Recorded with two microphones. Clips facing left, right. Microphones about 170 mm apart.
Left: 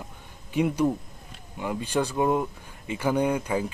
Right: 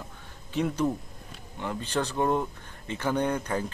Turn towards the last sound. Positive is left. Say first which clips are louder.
# left 3 dB
turn(degrees=10)  # may be behind; listen again after turning